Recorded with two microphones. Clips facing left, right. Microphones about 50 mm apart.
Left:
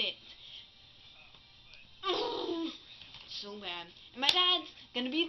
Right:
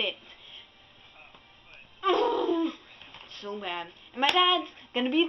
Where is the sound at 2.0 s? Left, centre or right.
Right.